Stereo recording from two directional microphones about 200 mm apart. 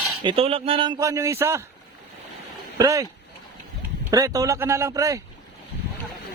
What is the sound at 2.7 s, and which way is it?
Speech, 15° right (ahead or behind).